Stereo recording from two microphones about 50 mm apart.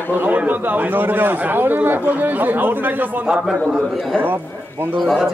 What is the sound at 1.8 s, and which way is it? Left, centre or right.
A man's voice, right.